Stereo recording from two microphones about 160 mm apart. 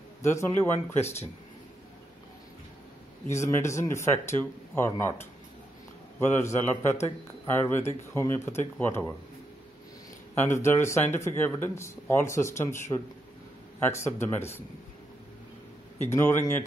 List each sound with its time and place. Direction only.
0.2 s speech: 15° left (ahead or behind)
3.3 s speech: 15° left (ahead or behind)
10.3 s speech: 15° left (ahead or behind)
16.1 s speech: 15° left (ahead or behind)